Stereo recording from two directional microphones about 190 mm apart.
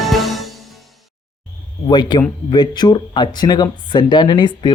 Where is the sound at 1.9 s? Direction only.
25° left (ahead or behind).